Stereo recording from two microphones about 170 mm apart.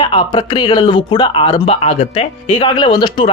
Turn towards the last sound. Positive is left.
turn(degrees=25)  # may be behind; listen again after turning